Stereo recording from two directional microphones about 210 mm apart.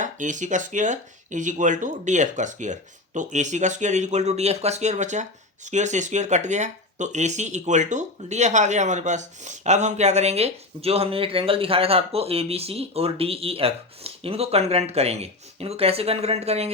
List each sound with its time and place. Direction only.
0.0 s speech: 35° right (ahead or behind)